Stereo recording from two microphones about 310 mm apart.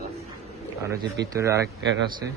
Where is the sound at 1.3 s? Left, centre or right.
Centre.